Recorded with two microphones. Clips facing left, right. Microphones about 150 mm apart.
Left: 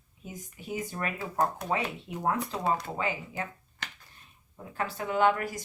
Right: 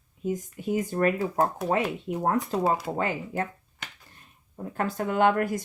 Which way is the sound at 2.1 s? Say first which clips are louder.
Right 8 dB; 60° right (ahead or behind).